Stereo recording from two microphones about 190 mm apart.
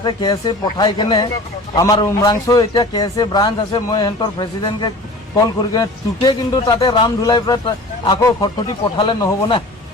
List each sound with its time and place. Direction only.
0.0 s a man's voice: 20° left (ahead or behind)